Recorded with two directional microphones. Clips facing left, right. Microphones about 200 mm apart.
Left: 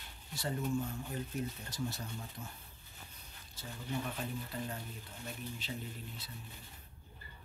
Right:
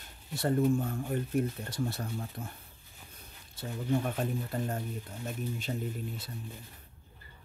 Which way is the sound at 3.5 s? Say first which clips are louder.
Right 9 dB; 55° right (ahead or behind).